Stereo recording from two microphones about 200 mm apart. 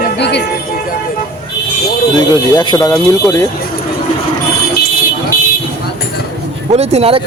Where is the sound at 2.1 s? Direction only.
20° left (ahead or behind).